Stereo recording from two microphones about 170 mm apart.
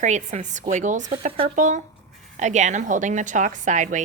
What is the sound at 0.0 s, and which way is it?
A woman's voice, 45° right (ahead or behind).